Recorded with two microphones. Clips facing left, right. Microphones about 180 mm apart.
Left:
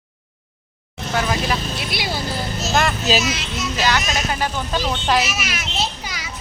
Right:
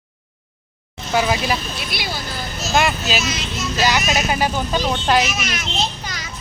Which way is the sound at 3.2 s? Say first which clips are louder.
Even; 5° left (ahead or behind).